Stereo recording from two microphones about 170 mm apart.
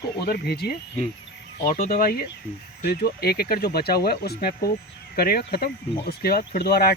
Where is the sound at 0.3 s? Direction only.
70° left (ahead or behind).